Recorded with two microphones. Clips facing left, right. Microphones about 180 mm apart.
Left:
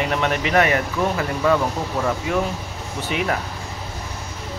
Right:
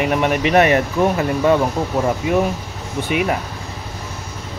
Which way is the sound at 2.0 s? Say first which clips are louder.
Right 5 dB; 20° right (ahead or behind).